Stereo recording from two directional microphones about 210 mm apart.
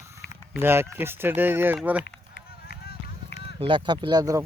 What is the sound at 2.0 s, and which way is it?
Run, 45° left (ahead or behind).